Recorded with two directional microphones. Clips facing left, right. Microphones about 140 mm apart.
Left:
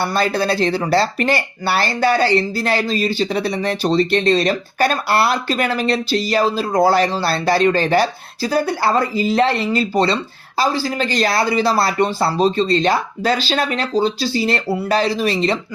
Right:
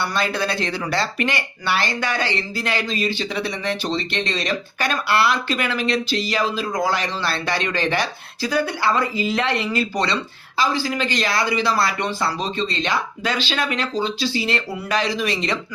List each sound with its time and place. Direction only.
0.0 s speech: 35° left (ahead or behind)